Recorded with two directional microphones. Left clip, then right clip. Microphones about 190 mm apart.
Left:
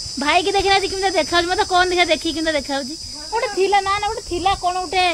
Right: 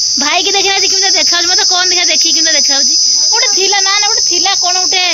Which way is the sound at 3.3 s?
5° right (ahead or behind).